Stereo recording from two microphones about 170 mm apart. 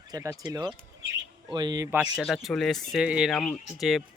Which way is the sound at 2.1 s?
Centre (ahead or behind).